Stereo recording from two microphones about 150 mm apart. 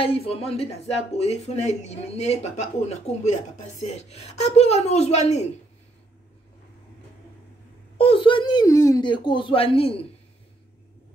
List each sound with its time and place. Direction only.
0.0 s speech: 40° left (ahead or behind)
8.0 s speech: 35° left (ahead or behind)